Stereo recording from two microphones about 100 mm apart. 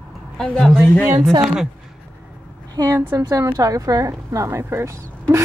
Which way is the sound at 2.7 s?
35° right (ahead or behind).